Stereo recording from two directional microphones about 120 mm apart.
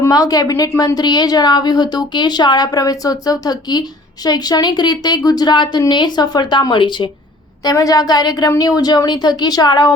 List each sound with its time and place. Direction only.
0.0 s speech: 30° left (ahead or behind)
7.6 s speech: 30° left (ahead or behind)